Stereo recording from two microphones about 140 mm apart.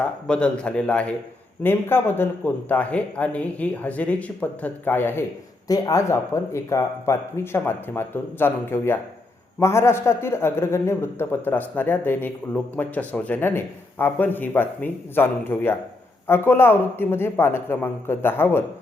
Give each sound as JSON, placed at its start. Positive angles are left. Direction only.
{"t": 0.3, "sound": "a man's voice", "side_deg": 5}
{"t": 5.6, "sound": "a man's voice", "side_deg": 25}